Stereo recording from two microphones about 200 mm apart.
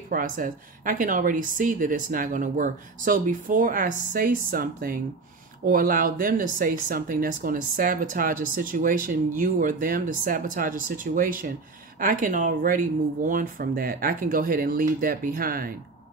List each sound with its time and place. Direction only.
0.1 s speech: 45° right (ahead or behind)